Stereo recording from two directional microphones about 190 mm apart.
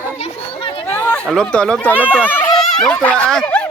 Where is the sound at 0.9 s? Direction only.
5° left (ahead or behind).